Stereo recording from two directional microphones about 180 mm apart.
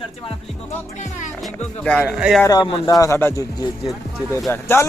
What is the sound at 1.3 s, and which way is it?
Speech, 5° left (ahead or behind).